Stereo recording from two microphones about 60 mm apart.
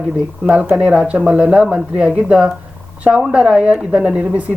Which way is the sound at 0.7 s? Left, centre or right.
Centre.